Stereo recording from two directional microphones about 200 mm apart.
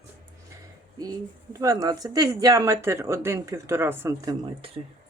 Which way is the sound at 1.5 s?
15° right (ahead or behind).